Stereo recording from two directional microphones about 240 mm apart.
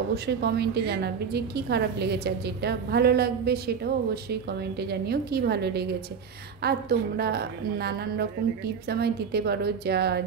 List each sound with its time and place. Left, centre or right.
0.1 s a woman's voice: right